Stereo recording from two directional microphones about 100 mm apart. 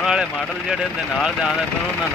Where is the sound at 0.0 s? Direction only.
5° right (ahead or behind).